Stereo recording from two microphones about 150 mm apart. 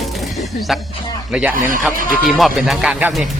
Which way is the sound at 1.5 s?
65° right (ahead or behind).